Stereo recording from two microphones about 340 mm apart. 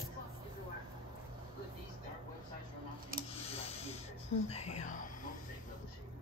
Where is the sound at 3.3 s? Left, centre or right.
Centre.